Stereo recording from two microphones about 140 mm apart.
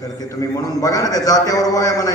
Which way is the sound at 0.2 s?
25° left (ahead or behind).